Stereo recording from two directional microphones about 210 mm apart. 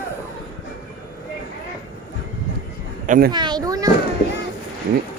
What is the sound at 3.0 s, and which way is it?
Speech, 40° right (ahead or behind).